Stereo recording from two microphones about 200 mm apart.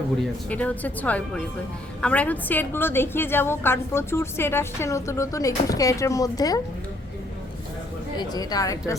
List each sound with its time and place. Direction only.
0.2 s a woman's voice: 5° left (ahead or behind)
8.2 s a woman's voice: 20° left (ahead or behind)